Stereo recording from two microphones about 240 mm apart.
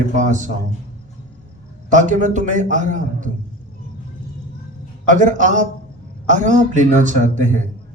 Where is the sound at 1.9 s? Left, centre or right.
Right.